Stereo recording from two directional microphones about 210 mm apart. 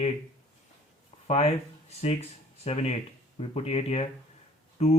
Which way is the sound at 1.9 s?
30° left (ahead or behind).